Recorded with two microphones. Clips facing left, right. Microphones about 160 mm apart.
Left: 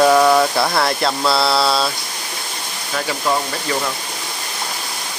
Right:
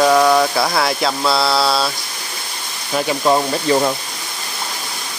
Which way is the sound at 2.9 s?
20° right (ahead or behind).